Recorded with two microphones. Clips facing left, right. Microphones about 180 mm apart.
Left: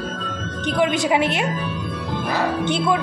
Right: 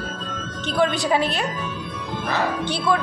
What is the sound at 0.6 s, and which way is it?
Speech, 15° left (ahead or behind).